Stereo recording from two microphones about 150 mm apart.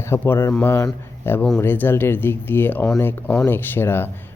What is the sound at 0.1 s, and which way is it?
Speech, 15° left (ahead or behind).